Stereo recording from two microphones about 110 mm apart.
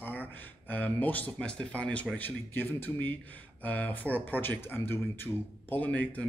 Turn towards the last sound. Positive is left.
turn(degrees=15)  # may be behind; listen again after turning